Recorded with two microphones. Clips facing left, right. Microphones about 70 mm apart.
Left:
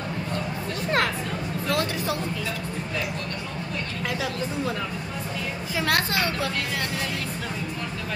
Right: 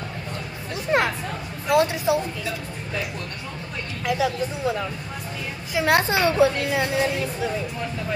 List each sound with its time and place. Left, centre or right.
0.9 s chatter: centre
1.7 s a woman's voice: centre
5.8 s a woman's voice: right